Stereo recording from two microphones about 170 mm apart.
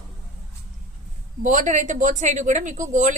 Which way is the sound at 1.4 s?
50° right (ahead or behind).